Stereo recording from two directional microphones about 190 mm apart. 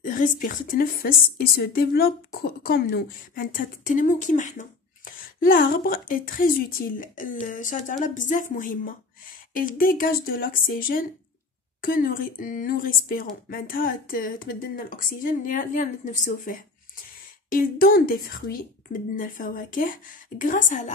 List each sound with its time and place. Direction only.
0.0 s a woman's voice: 45° left (ahead or behind)